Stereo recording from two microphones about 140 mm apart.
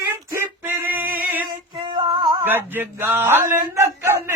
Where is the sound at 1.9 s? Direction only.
30° right (ahead or behind).